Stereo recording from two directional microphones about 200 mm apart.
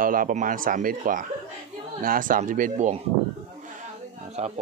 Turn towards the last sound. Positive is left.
turn(degrees=-35)  # may be behind; listen again after turning